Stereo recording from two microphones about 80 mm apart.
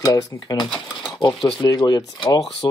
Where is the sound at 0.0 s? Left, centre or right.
Left.